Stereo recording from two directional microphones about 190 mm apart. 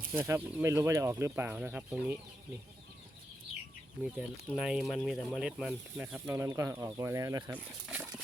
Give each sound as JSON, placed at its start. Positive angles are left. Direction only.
{"t": 0.1, "sound": "speech", "side_deg": -15}
{"t": 4.0, "sound": "speech", "side_deg": -5}